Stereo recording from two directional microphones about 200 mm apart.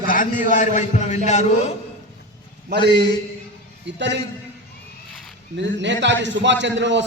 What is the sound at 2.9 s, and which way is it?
Speech, 20° left (ahead or behind).